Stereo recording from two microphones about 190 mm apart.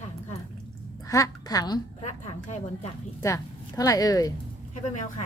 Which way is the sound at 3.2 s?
15° left (ahead or behind).